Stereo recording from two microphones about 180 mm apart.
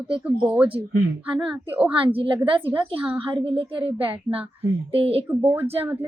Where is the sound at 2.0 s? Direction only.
30° right (ahead or behind).